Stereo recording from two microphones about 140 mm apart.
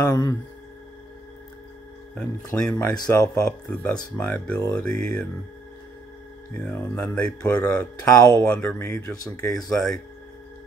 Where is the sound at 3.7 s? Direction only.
10° left (ahead or behind).